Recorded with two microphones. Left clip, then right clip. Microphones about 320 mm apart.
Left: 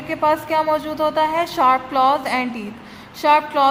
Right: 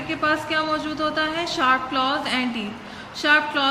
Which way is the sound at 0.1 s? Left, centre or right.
Centre.